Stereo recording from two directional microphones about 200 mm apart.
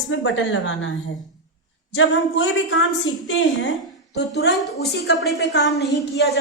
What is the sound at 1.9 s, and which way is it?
A woman's voice, 70° left (ahead or behind).